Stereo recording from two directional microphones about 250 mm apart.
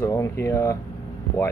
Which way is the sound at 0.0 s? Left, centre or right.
Centre.